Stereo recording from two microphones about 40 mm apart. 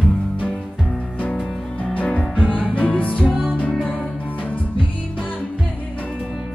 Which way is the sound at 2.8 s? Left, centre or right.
Left.